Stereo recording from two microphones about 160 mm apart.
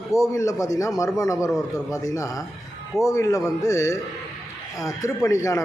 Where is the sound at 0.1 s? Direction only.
20° left (ahead or behind).